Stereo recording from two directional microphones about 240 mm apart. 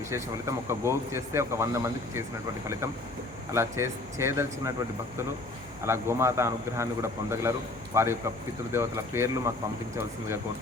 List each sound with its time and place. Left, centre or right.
0.1 s speech: centre
3.5 s speech: centre
5.8 s speech: centre